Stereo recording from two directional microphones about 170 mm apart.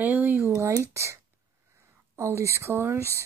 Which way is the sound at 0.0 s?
10° right (ahead or behind).